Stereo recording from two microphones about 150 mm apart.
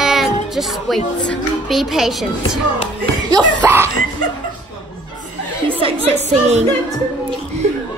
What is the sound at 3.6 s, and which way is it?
Laughter, 15° right (ahead or behind).